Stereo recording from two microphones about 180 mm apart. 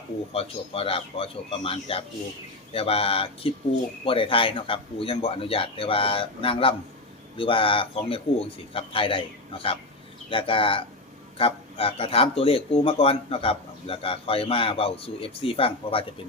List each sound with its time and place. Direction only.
0.3 s speech: 35° left (ahead or behind)
10.2 s speech: 30° left (ahead or behind)